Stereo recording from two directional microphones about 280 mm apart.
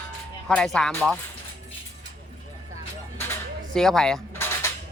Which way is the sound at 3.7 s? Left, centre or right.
Centre.